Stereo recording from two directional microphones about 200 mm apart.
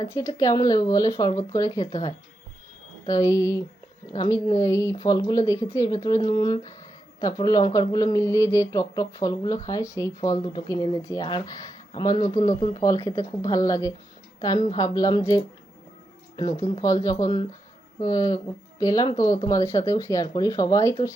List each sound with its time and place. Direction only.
0.0 s speech: 15° left (ahead or behind)
3.1 s a woman's voice: 15° left (ahead or behind)